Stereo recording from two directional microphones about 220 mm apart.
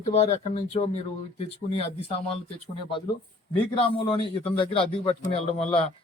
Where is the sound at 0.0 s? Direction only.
30° left (ahead or behind).